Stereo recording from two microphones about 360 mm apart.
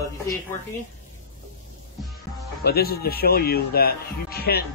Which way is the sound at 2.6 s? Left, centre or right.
Left.